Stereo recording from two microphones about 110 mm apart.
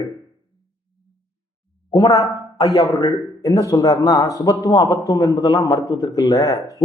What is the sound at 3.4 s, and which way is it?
A man's voice, 30° left (ahead or behind).